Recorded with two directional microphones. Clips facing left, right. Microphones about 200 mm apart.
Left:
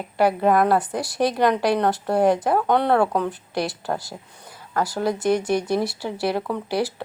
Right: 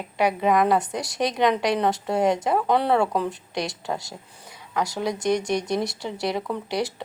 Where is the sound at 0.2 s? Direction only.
5° left (ahead or behind).